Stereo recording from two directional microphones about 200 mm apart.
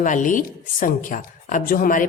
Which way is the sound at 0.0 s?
40° left (ahead or behind).